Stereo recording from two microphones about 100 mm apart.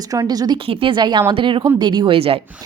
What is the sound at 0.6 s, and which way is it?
Speech, 65° right (ahead or behind).